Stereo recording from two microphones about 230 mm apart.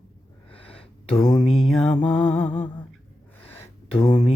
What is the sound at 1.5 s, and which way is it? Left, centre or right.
Mantra, centre.